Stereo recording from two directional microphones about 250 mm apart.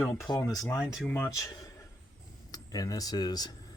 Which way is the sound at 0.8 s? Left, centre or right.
Centre.